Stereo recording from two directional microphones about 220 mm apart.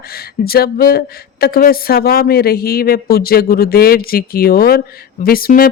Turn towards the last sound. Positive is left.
turn(degrees=40)  # may be behind; listen again after turning